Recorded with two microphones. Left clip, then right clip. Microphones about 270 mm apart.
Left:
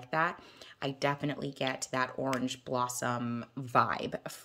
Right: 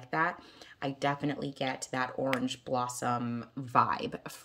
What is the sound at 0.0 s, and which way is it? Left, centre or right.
Speech, centre.